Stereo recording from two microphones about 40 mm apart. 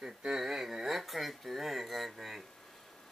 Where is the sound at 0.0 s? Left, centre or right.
Centre.